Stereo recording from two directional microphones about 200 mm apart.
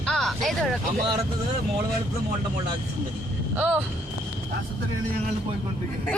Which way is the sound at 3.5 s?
10° right (ahead or behind).